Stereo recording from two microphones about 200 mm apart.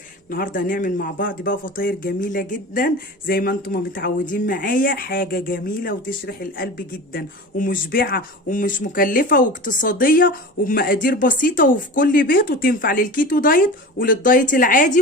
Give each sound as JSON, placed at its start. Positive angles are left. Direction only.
{"t": 0.3, "sound": "speech", "side_deg": 45}